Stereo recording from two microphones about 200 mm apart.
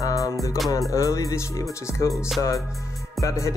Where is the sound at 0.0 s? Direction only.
15° left (ahead or behind).